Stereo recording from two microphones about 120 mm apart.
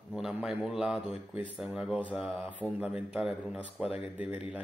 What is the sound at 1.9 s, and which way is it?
Speech, 10° right (ahead or behind).